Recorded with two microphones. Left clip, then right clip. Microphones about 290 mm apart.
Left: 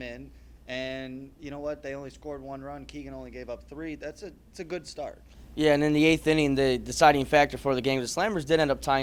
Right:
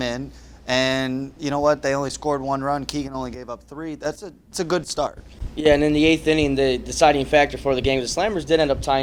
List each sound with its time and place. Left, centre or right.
0.7 s speech: centre
5.5 s a man's voice: left